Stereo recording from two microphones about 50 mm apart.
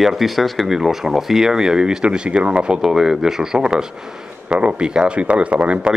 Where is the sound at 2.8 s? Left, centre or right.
Centre; by 5.9 s right.